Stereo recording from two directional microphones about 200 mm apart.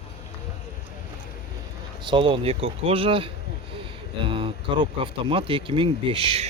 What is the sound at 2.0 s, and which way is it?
Speech, 25° right (ahead or behind).